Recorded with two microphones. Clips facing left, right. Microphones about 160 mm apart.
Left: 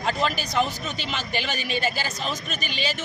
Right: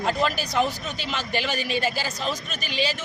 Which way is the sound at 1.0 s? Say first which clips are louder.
Right 2 dB; centre (ahead or behind).